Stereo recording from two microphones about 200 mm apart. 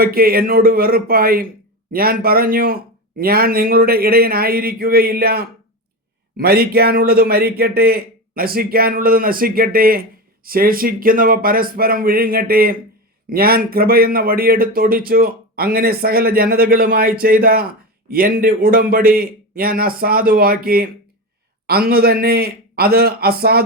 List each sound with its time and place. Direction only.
0.0 s a man's voice: 50° right (ahead or behind)